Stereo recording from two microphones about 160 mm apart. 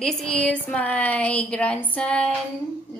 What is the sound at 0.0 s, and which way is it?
A woman's voice, 5° left (ahead or behind).